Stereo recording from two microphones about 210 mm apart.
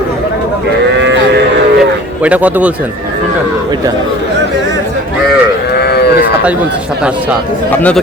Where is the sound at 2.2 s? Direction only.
5° right (ahead or behind).